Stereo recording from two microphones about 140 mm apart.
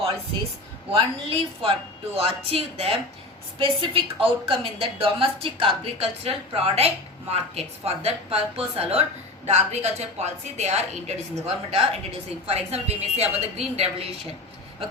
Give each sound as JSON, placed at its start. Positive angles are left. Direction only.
{"t": 0.9, "sound": "a woman's voice", "side_deg": -40}